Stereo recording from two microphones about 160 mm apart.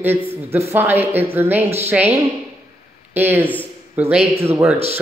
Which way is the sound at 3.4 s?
10° left (ahead or behind).